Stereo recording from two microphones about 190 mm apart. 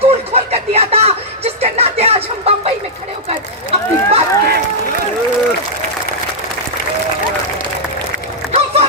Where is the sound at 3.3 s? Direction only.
35° right (ahead or behind).